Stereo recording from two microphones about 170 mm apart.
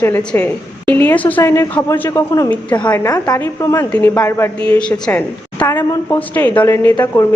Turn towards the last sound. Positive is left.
turn(degrees=20)  # may be behind; listen again after turning